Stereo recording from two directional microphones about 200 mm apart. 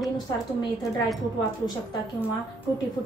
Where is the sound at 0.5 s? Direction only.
20° left (ahead or behind).